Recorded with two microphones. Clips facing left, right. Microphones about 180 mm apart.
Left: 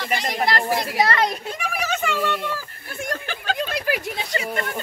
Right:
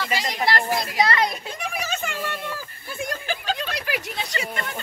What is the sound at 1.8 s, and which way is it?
Speech, 75° left (ahead or behind).